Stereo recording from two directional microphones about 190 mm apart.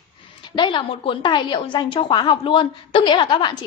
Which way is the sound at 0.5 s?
25° left (ahead or behind).